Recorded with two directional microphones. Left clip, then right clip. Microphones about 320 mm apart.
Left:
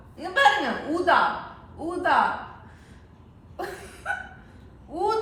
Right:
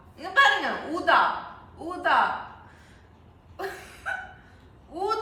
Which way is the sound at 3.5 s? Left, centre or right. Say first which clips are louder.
Left 1 dB; centre.